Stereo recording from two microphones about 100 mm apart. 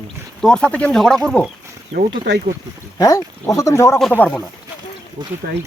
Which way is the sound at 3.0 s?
30° left (ahead or behind).